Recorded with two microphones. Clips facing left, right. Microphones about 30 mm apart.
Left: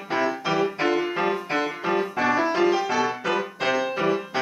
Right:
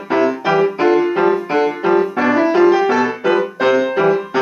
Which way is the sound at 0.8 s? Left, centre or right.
Centre.